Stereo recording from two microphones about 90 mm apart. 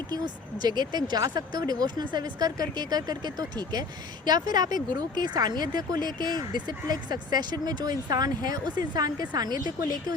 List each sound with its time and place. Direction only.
0.6 s speech: 50° right (ahead or behind)